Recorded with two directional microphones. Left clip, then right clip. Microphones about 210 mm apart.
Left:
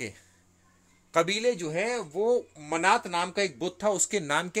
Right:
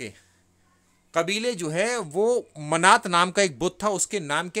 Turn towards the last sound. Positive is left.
turn(degrees=-10)  # may be behind; listen again after turning